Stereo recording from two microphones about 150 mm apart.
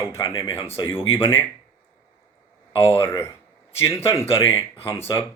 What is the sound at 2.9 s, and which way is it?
A man's voice, 15° left (ahead or behind).